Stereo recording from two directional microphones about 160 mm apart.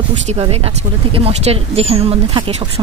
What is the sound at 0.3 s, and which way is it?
Speech, 40° right (ahead or behind).